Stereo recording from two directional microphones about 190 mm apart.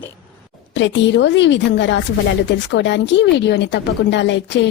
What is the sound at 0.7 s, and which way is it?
A woman's voice, 70° left (ahead or behind).